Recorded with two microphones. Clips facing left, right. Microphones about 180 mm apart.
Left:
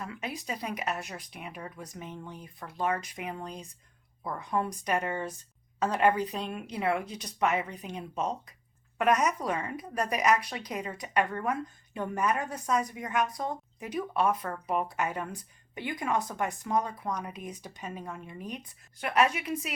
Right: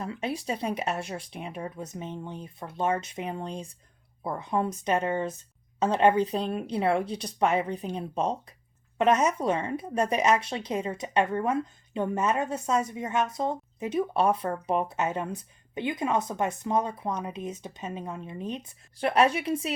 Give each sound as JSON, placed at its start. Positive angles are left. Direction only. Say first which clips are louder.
{"t": 0.0, "sound": "speech", "louder": "right 6 dB", "side_deg": -30}